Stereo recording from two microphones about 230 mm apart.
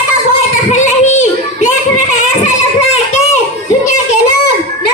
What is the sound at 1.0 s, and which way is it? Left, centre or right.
Child singing, left.